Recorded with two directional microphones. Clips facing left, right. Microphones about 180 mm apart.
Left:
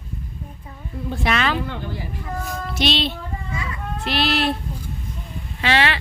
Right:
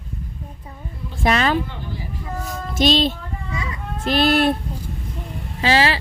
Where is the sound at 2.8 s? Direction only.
45° right (ahead or behind).